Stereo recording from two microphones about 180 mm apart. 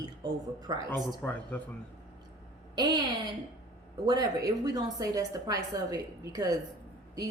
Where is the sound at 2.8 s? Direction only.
20° right (ahead or behind).